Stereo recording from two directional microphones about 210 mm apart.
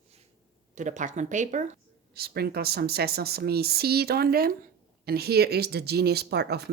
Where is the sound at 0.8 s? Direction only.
35° right (ahead or behind).